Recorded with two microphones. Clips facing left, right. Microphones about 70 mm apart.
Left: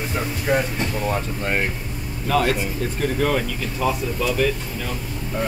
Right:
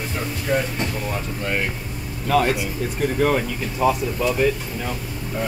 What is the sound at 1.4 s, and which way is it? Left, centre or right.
Speech, left.